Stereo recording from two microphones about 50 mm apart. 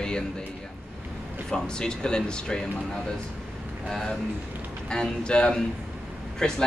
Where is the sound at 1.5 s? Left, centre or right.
Centre.